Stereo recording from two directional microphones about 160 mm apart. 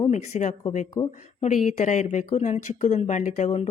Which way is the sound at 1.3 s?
45° left (ahead or behind).